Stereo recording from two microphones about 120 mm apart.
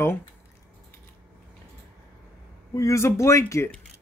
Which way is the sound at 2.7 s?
25° left (ahead or behind).